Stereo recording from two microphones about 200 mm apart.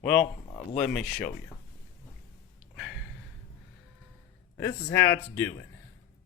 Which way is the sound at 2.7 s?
Centre (ahead or behind).